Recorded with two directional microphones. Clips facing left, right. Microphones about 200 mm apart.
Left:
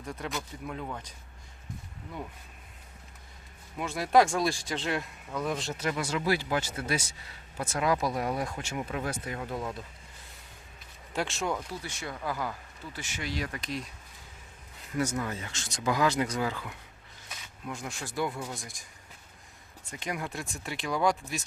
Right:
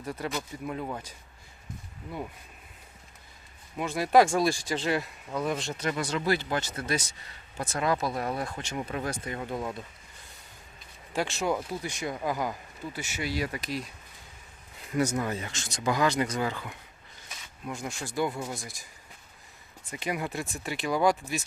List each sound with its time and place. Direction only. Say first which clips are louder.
0.0 s speech: right 3 dB; 5° right (ahead or behind)
3.8 s speech: right 2 dB; centre (ahead or behind)
11.1 s speech: right 3 dB; centre (ahead or behind)
11.5 s speech: right 4 dB; 15° right (ahead or behind)
14.9 s speech: right 3 dB; 15° right (ahead or behind)
15.7 s speech: right 1 dB; centre (ahead or behind)
19.9 s speech: right 3 dB; 5° right (ahead or behind)